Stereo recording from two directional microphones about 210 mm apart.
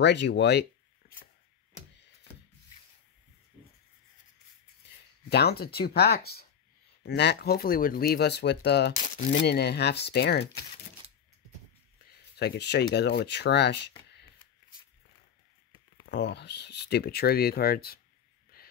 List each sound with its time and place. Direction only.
0.0 s speech: 55° left (ahead or behind)
5.3 s speech: 50° left (ahead or behind)
9.0 s speech: 35° left (ahead or behind)
9.4 s speech: 50° left (ahead or behind)
12.4 s speech: 50° left (ahead or behind)
16.1 s speech: 55° left (ahead or behind)
18.5 s a sound: 45° left (ahead or behind)